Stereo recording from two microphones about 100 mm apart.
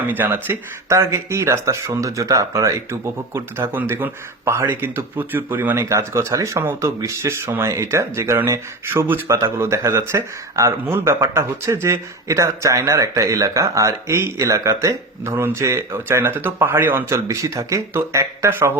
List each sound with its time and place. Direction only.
0.1 s speech: 20° right (ahead or behind)
3.3 s speech: 20° right (ahead or behind)